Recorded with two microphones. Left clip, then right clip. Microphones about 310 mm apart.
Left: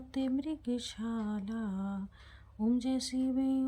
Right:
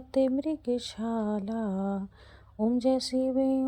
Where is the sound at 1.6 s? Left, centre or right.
Right.